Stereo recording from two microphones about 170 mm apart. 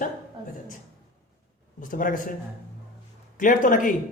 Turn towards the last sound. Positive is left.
turn(degrees=50)  # may be behind; listen again after turning